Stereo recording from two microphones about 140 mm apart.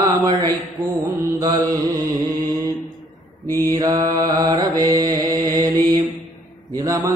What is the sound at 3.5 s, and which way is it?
Mantra, 15° left (ahead or behind).